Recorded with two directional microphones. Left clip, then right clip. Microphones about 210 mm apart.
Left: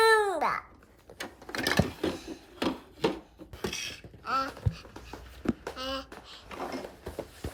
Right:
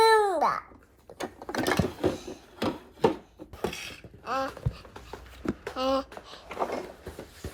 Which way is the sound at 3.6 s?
Centre (ahead or behind).